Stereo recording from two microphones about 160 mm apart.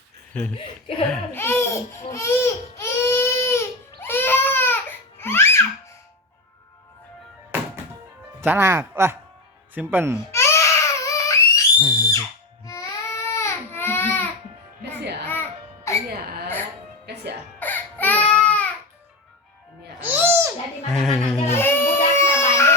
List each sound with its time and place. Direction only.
1.1 s speech: 15° left (ahead or behind)
4.0 s baby cry: 15° left (ahead or behind)
8.4 s speech: 15° right (ahead or behind)
10.3 s crying: 15° left (ahead or behind)
11.9 s speech: 20° left (ahead or behind)
12.6 s baby cry: 20° left (ahead or behind)
15.3 s music: 15° left (ahead or behind)
17.1 s music: 90° right
17.6 s baby cry: 10° left (ahead or behind)
20.0 s music: 15° right (ahead or behind)
20.9 s music: centre (ahead or behind)
21.4 s baby cry: 15° left (ahead or behind)